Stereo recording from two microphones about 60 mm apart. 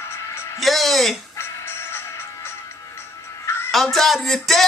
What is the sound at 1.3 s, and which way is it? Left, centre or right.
Music, left.